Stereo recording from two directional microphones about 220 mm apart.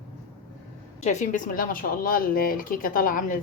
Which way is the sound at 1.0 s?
35° left (ahead or behind).